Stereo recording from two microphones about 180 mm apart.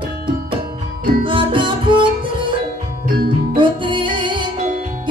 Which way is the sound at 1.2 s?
30° right (ahead or behind).